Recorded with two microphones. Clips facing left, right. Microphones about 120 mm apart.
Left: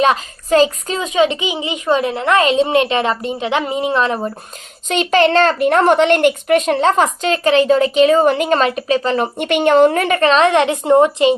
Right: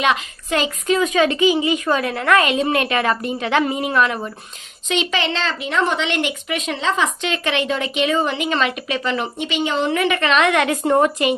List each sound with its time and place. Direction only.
0.0 s a woman's voice: 35° left (ahead or behind)
4.9 s a woman's voice: 45° left (ahead or behind)
9.4 s a woman's voice: 55° left (ahead or behind); by 11.3 s 25° left (ahead or behind)